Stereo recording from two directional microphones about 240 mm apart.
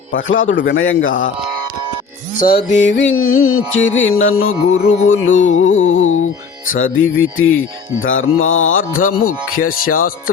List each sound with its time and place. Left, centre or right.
0.2 s music: left
2.6 s mantra: left
3.8 s music: left
4.2 s mantra: left
4.8 s music: left
6.7 s mantra: left
8.9 s speech: left
9.2 s mantra: left
9.6 s speech: left